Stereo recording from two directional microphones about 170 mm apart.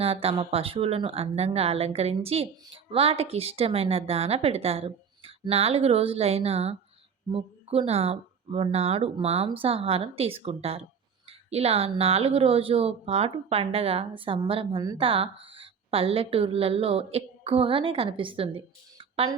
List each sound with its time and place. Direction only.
0.0 s speech: 35° right (ahead or behind)